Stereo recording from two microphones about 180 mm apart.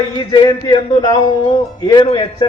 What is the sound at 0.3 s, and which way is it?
A man's voice, 25° left (ahead or behind).